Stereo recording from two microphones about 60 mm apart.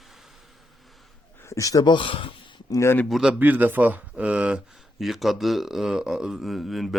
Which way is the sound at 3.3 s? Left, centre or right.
Right.